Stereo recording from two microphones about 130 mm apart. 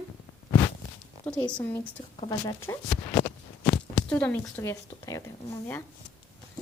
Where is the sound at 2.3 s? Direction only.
30° left (ahead or behind).